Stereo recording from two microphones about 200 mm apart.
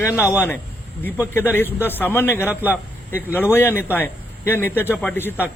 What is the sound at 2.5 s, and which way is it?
Speech, 10° right (ahead or behind).